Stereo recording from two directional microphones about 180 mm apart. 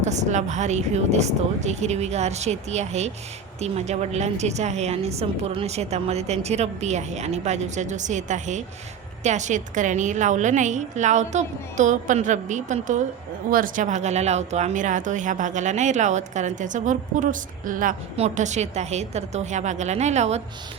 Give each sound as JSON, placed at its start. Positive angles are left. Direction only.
{"t": 0.0, "sound": "a woman's voice", "side_deg": -40}